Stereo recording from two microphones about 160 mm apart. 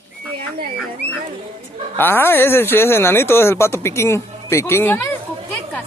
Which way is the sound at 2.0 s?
15° left (ahead or behind).